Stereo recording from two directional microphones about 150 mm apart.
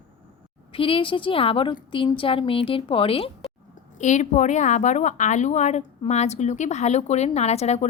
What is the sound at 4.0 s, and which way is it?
A woman's voice, 50° left (ahead or behind).